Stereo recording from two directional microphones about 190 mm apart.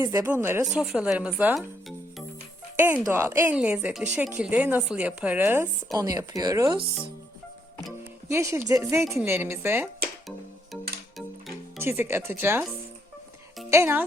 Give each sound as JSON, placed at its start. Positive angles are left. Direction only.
{"t": 0.0, "sound": "speech", "side_deg": -15}
{"t": 2.7, "sound": "speech", "side_deg": -10}
{"t": 8.3, "sound": "speech", "side_deg": -15}
{"t": 11.8, "sound": "speech", "side_deg": -15}
{"t": 13.7, "sound": "a child's voice", "side_deg": -15}